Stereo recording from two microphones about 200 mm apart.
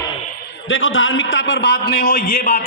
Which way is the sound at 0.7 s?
75° left (ahead or behind).